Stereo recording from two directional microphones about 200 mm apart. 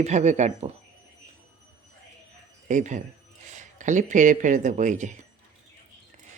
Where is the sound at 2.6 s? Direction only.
40° right (ahead or behind).